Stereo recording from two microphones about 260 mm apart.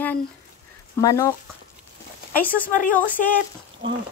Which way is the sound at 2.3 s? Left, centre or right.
Centre.